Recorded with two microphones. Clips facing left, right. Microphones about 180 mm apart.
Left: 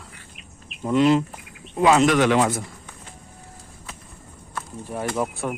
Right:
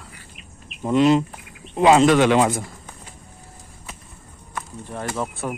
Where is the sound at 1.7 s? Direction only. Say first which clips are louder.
Right 3 dB; 25° right (ahead or behind).